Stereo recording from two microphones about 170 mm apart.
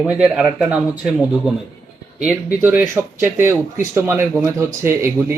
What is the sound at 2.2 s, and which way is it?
Speech, 10° right (ahead or behind).